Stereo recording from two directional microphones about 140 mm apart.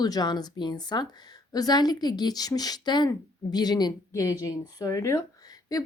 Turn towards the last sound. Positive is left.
turn(degrees=25)  # may be behind; listen again after turning